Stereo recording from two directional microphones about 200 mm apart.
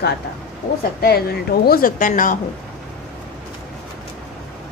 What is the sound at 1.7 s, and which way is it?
Speech, 45° left (ahead or behind).